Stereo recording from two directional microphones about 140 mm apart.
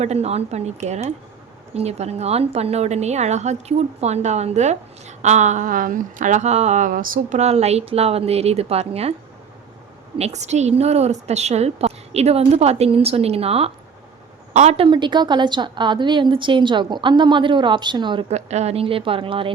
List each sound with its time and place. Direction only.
0.0 s a woman's voice: 50° right (ahead or behind); by 7.3 s 80° right
7.3 s a woman's voice: 50° right (ahead or behind)
10.2 s a woman's voice: 50° right (ahead or behind)
14.8 s a woman's voice: 35° right (ahead or behind)
18.3 s a woman's voice: 50° right (ahead or behind)